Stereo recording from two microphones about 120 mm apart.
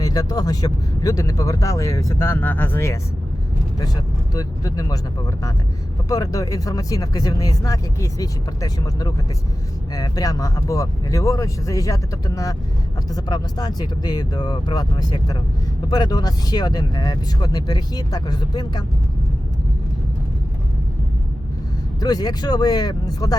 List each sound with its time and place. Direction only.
0.0 s speech: 30° left (ahead or behind)
4.4 s speech: 30° left (ahead or behind)
22.0 s speech: 35° left (ahead or behind)